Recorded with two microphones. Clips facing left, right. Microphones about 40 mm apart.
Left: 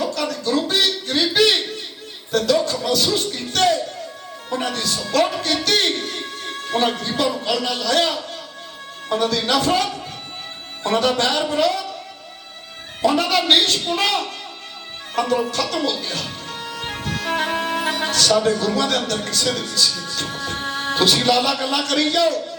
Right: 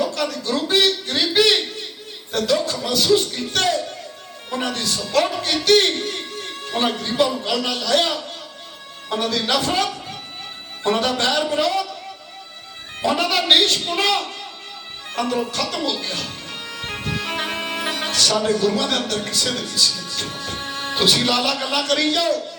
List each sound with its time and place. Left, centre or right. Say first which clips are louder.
0.1 s a sound: left 2 dB; centre
2.3 s music: left 2 dB; centre
5.6 s a man's voice: right 7 dB; centre
7.2 s music: right 2 dB; centre
13.0 s a sound: left 2 dB; centre
15.1 s music: left 3 dB; centre
17.1 s music: left 4 dB; centre